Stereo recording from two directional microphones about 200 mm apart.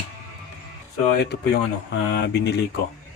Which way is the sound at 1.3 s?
55° left (ahead or behind).